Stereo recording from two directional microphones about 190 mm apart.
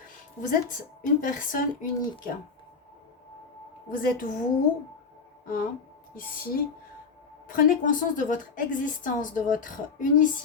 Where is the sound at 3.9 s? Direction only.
45° left (ahead or behind).